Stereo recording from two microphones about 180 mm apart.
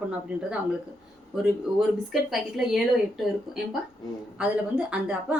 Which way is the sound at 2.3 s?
Centre (ahead or behind).